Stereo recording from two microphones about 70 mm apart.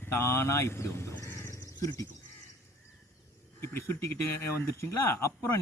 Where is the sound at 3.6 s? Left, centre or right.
Left.